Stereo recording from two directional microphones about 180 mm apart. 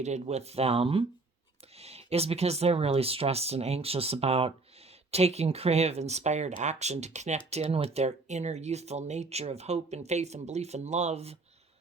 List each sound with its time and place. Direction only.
0.0 s speech: 40° right (ahead or behind)